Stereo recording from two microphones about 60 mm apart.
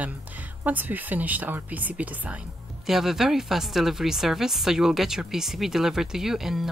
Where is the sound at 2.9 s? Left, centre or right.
Centre.